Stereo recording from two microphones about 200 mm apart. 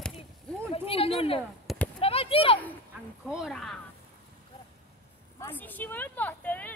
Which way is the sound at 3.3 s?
Centre (ahead or behind).